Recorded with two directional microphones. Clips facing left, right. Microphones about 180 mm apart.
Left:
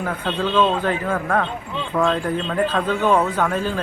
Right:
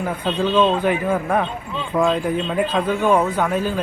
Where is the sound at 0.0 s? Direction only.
10° right (ahead or behind).